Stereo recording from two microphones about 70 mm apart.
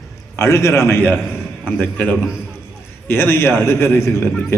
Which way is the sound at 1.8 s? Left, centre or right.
Left.